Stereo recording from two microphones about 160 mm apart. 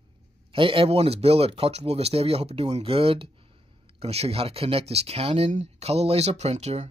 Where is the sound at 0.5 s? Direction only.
35° right (ahead or behind).